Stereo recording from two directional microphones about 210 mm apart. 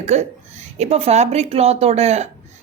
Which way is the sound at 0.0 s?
30° right (ahead or behind).